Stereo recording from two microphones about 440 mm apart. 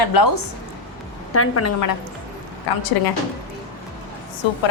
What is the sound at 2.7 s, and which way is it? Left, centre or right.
Speech, left.